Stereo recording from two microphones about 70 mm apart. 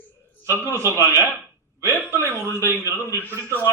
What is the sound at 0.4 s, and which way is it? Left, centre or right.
A man's voice, right.